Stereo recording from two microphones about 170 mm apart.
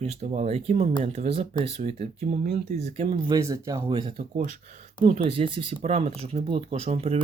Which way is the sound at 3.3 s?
20° right (ahead or behind).